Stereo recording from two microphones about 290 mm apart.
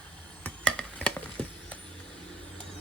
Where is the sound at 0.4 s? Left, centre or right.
Centre.